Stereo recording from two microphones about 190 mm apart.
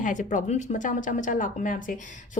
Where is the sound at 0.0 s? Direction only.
40° left (ahead or behind).